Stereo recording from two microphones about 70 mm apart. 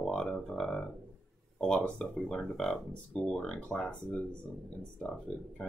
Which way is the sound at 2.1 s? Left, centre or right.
Centre.